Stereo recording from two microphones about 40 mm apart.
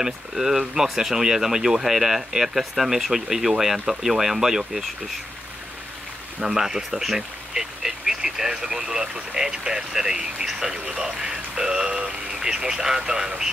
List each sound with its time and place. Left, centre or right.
0.0 s speech: centre
6.4 s speech: centre